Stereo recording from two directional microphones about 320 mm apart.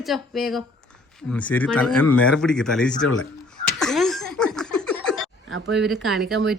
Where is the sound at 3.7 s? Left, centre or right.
Centre.